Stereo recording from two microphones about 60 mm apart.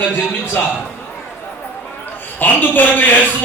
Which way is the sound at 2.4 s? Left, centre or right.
Left.